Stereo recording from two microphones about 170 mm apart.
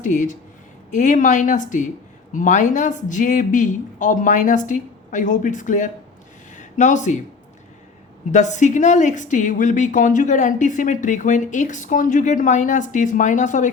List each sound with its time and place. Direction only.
0.0 s a woman's voice: 45° left (ahead or behind)
6.5 s a sound: 45° left (ahead or behind)
8.3 s a woman's voice: 45° left (ahead or behind)